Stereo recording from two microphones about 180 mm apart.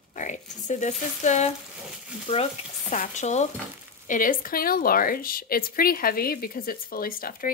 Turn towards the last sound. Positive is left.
turn(degrees=55)  # may be behind; listen again after turning